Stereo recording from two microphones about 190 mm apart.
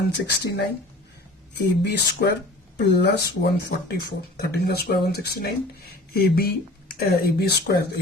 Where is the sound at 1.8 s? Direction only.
60° left (ahead or behind).